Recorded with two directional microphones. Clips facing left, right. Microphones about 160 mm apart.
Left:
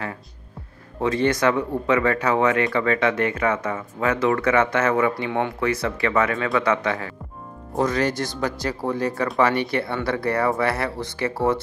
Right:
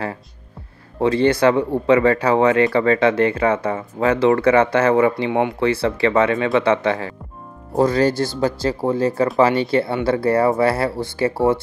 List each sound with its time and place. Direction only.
1.0 s speech: 30° right (ahead or behind)